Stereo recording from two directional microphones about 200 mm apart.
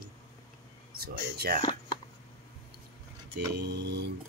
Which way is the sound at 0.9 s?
50° right (ahead or behind).